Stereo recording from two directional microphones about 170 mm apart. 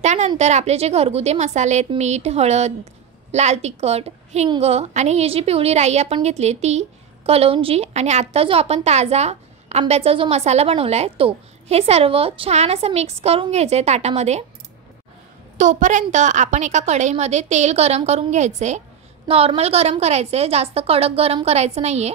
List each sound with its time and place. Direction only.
0.0 s a sound: 45° right (ahead or behind)
0.4 s a woman's voice: 40° right (ahead or behind)
15.5 s a woman's voice: 45° right (ahead or behind)